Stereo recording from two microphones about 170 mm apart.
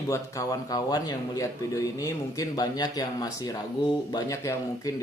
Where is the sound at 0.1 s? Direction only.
20° left (ahead or behind).